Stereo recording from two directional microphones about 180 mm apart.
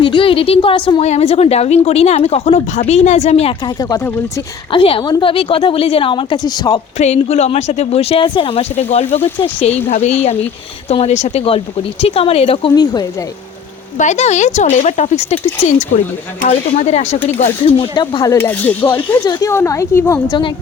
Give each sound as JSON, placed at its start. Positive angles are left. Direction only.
{"t": 0.0, "sound": "a woman's voice", "side_deg": 30}
{"t": 3.8, "sound": "a woman's voice", "side_deg": 20}
{"t": 7.0, "sound": "a woman's voice", "side_deg": 40}
{"t": 14.0, "sound": "a woman's voice", "side_deg": 40}
{"t": 16.4, "sound": "a woman's voice", "side_deg": 40}
{"t": 17.7, "sound": "speech", "side_deg": 30}